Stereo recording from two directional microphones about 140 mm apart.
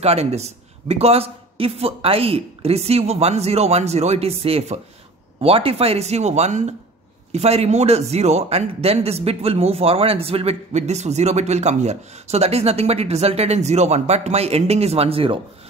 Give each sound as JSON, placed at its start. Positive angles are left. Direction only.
{"t": 0.0, "sound": "a man's voice", "side_deg": -50}